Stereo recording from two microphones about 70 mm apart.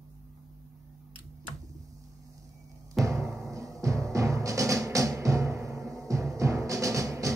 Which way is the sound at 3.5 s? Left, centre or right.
Right.